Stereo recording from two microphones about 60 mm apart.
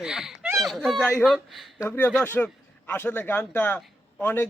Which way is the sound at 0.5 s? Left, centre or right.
Centre.